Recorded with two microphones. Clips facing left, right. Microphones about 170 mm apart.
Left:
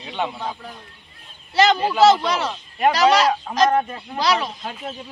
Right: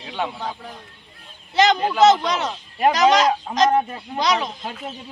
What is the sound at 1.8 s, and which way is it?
Speech, 5° left (ahead or behind).